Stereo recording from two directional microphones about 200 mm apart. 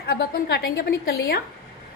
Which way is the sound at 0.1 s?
55° left (ahead or behind).